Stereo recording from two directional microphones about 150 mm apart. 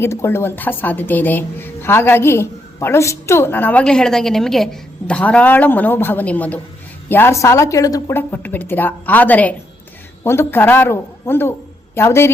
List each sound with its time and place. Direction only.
0.0 s a woman's voice: 15° left (ahead or behind)